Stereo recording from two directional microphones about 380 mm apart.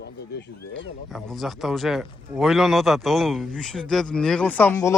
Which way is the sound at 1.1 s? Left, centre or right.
Centre.